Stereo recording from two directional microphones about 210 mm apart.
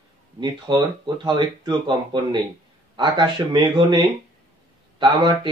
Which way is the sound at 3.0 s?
20° right (ahead or behind).